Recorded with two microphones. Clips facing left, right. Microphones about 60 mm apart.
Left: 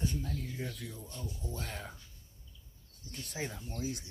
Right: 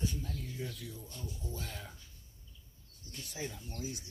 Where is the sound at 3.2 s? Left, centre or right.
Left.